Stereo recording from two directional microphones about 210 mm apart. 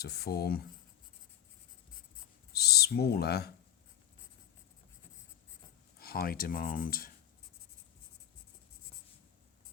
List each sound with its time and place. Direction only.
0.0 s speech: 50° left (ahead or behind)
2.5 s speech: 50° left (ahead or behind)
6.0 s speech: 45° left (ahead or behind)